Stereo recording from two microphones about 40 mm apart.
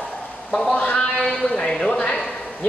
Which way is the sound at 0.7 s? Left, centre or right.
Left.